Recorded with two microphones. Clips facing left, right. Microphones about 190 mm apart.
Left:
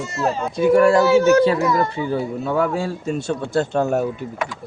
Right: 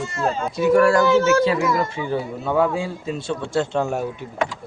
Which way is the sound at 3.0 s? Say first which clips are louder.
Left 3 dB; 45° left (ahead or behind).